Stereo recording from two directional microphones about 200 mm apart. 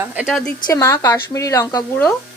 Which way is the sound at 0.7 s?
15° left (ahead or behind).